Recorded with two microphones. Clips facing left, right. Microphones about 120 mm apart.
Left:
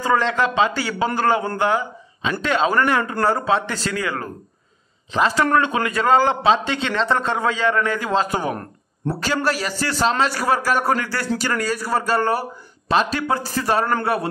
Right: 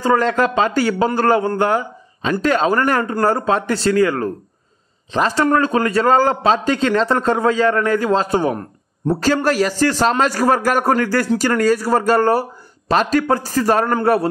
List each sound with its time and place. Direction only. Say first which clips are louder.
0.0 s a man's voice: right 3 dB; 40° right (ahead or behind)
8.5 s a sound: right 3 dB; 15° right (ahead or behind)
9.2 s a man's voice: right 6 dB; 45° right (ahead or behind)